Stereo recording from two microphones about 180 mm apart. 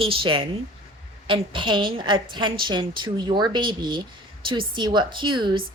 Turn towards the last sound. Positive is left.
turn(degrees=-25)  # may be behind; listen again after turning